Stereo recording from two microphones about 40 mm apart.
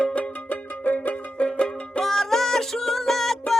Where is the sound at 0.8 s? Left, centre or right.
Left.